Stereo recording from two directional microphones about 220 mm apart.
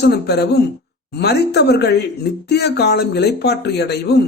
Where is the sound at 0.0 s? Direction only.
50° left (ahead or behind).